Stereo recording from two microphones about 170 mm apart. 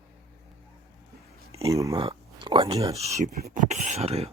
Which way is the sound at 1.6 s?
20° right (ahead or behind).